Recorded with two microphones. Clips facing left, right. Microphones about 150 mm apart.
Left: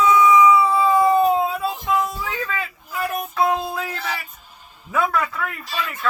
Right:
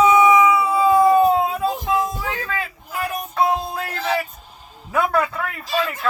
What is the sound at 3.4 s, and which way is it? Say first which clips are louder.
Speech: even; 35° right (ahead or behind).